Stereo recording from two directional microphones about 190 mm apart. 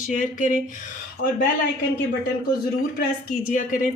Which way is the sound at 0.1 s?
45° left (ahead or behind).